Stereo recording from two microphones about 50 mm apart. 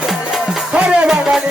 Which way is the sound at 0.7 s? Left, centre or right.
Right.